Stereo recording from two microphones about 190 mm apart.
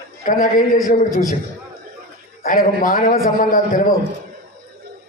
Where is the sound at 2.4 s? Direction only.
50° left (ahead or behind).